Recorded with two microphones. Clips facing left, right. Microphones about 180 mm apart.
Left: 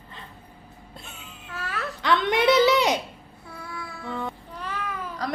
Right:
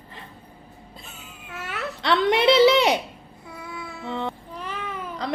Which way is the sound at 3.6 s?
20° right (ahead or behind).